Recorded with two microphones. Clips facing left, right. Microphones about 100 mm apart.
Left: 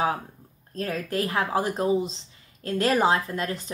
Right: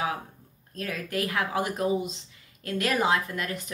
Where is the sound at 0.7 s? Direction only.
35° left (ahead or behind).